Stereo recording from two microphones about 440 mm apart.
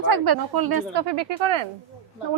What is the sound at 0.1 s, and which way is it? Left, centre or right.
A woman's voice, right.